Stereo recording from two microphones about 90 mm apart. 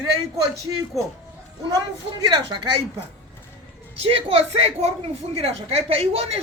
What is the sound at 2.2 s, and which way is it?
Speech, 55° right (ahead or behind).